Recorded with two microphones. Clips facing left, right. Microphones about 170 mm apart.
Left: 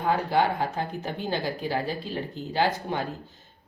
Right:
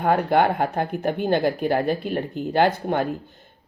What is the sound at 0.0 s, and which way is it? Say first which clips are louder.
A woman's voice: right 5 dB; 60° right (ahead or behind).